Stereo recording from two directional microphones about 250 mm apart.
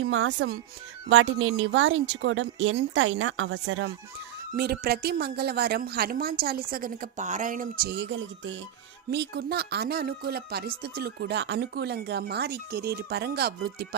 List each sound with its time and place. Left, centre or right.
0.1 s speech: right
4.5 s a woman's voice: right